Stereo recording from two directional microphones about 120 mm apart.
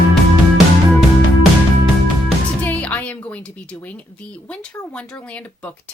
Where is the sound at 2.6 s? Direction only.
15° left (ahead or behind).